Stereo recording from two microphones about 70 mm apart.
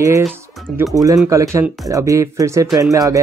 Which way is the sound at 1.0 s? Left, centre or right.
Right.